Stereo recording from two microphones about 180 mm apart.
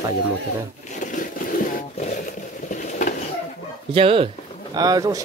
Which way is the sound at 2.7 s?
45° left (ahead or behind).